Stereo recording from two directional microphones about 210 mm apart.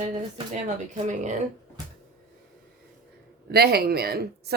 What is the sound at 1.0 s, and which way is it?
Music, 35° right (ahead or behind).